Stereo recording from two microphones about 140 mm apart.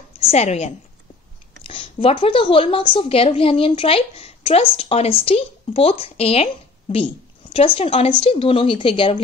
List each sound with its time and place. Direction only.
0.2 s a woman's voice: 50° left (ahead or behind)
1.7 s a woman's voice: 40° left (ahead or behind)